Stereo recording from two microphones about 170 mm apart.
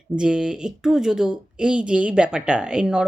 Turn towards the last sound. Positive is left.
turn(degrees=-5)  # may be behind; listen again after turning